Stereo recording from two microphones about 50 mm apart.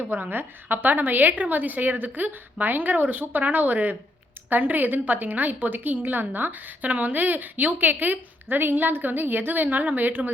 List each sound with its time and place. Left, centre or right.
0.1 s a woman's voice: right